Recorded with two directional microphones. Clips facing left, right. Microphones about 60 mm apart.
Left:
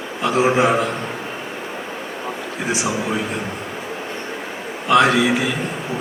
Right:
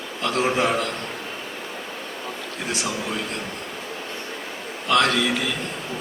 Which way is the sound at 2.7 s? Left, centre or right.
Centre.